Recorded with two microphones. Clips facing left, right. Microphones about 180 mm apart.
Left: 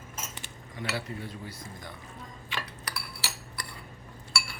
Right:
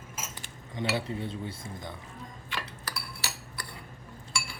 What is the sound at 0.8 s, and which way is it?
Speech, 25° right (ahead or behind).